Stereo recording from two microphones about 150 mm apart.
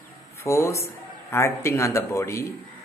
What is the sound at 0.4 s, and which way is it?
Speech, 20° left (ahead or behind).